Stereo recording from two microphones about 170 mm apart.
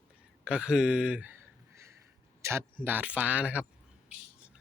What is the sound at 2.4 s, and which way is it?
Speech, 15° right (ahead or behind).